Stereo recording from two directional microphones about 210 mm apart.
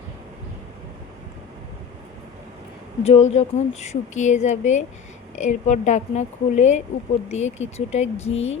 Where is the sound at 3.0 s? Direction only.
30° left (ahead or behind).